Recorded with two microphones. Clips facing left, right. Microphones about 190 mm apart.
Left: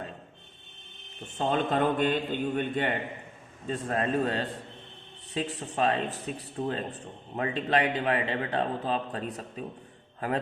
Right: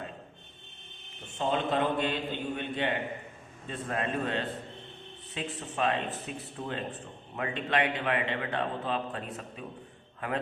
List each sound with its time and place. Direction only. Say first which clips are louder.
1.4 s a man's voice: left 2 dB; 45° left (ahead or behind)